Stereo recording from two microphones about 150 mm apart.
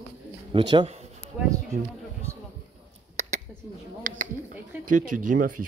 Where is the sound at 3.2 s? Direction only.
50° right (ahead or behind).